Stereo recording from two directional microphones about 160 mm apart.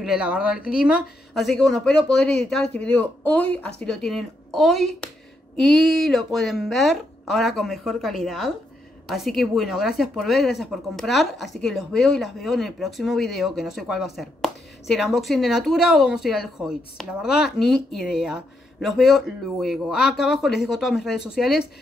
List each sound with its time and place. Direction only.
0.0 s a woman's voice: 5° right (ahead or behind)